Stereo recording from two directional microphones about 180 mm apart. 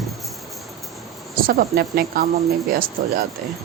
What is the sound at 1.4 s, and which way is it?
A woman's voice, 55° right (ahead or behind).